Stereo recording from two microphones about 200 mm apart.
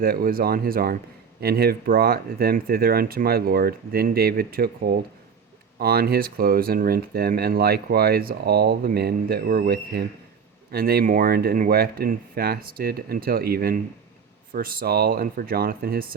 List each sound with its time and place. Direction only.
0.0 s speech: 45° right (ahead or behind)